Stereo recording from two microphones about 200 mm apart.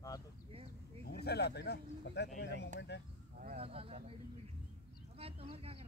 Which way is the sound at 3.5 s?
30° right (ahead or behind).